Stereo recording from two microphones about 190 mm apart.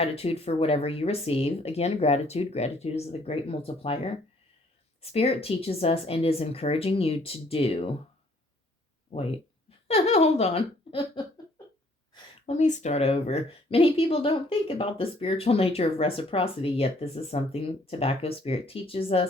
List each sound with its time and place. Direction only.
0.0 s speech: 30° left (ahead or behind)
9.1 s a sound: 30° left (ahead or behind)
12.1 s speech: 30° left (ahead or behind)